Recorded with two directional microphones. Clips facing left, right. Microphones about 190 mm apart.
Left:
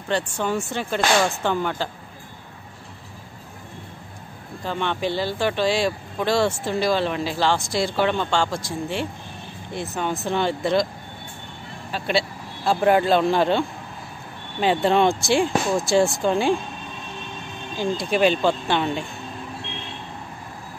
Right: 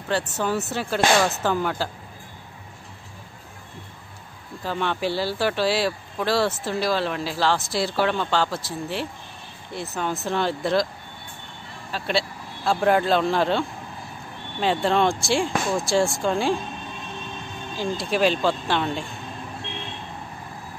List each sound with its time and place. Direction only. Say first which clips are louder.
0.1 s speech: left 1 dB; 5° right (ahead or behind)
4.6 s speech: even; 5° right (ahead or behind)
11.9 s speech: left 2 dB; centre (ahead or behind)
17.7 s speech: left 2 dB; centre (ahead or behind)